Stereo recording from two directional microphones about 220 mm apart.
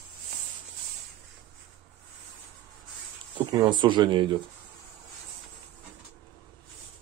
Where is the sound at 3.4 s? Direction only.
20° right (ahead or behind).